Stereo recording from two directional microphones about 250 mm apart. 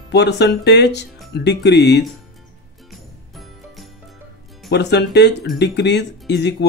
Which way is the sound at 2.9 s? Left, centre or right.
Centre.